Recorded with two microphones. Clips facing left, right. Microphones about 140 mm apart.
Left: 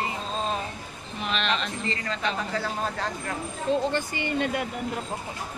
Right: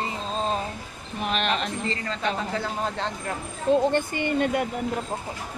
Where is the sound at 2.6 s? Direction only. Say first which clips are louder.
Right 1 dB; 20° right (ahead or behind).